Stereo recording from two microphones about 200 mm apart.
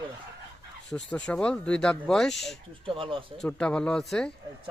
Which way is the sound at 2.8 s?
25° right (ahead or behind).